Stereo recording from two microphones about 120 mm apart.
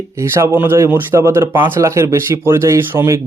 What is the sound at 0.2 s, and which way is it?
Speech, 20° right (ahead or behind).